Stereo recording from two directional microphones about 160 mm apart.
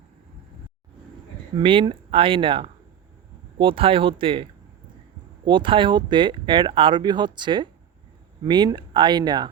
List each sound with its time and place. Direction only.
1.6 s speech: 35° right (ahead or behind)
5.5 s speech: 30° right (ahead or behind)